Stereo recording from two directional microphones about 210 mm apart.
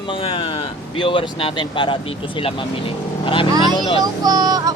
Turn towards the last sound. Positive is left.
turn(degrees=-15)  # may be behind; listen again after turning